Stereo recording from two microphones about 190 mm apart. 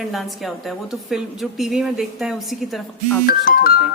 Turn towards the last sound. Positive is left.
turn(degrees=50)  # may be behind; listen again after turning